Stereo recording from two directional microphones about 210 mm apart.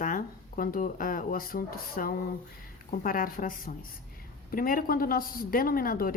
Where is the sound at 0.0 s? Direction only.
40° left (ahead or behind).